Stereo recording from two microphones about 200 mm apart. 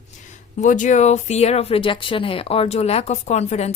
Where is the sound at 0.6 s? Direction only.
40° left (ahead or behind).